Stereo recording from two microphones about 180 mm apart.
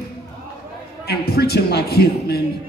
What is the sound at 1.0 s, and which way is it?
A man's voice, 60° left (ahead or behind).